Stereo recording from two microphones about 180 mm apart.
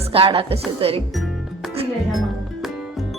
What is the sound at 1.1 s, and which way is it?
Music, centre (ahead or behind).